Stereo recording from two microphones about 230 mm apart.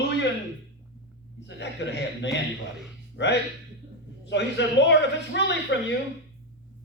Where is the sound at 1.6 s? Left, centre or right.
Left.